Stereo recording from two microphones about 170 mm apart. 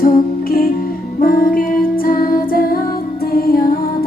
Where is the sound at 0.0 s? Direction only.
60° left (ahead or behind).